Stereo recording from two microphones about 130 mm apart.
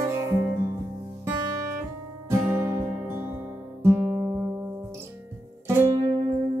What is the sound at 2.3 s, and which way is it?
Music, 15° right (ahead or behind).